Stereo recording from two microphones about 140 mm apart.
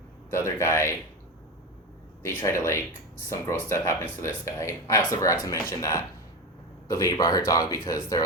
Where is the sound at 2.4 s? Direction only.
20° left (ahead or behind).